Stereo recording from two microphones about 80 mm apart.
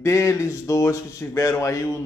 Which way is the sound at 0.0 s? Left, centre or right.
Left.